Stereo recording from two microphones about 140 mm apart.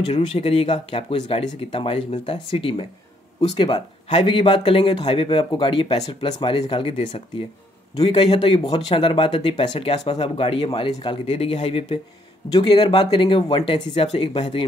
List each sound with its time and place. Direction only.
0.1 s speech: 45° left (ahead or behind)